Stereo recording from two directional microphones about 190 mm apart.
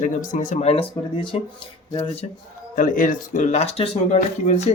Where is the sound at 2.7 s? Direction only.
45° left (ahead or behind).